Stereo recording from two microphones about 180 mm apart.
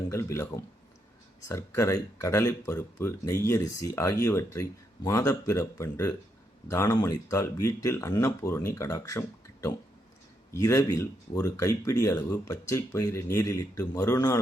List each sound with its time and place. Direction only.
0.1 s speech: 15° left (ahead or behind)